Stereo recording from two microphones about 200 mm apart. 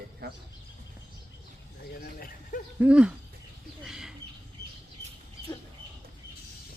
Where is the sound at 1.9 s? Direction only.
45° left (ahead or behind).